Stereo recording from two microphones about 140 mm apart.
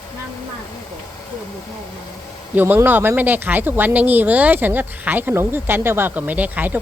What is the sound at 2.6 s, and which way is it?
Speech, 15° right (ahead or behind).